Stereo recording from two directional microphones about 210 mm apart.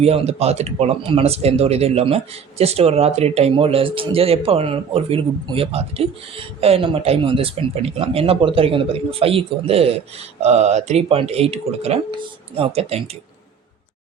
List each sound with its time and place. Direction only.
0.0 s speech: 30° right (ahead or behind)